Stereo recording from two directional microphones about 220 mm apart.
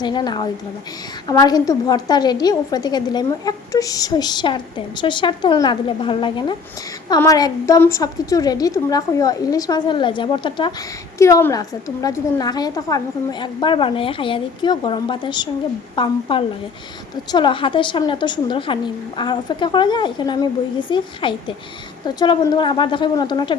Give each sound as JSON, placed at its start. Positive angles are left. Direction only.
{"t": 0.0, "sound": "a woman's voice", "side_deg": 20}
{"t": 17.3, "sound": "a woman's voice", "side_deg": 20}